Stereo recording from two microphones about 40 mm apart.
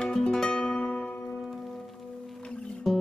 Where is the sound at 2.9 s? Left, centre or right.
Centre.